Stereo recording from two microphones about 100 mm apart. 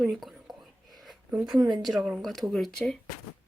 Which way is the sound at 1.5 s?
45° right (ahead or behind).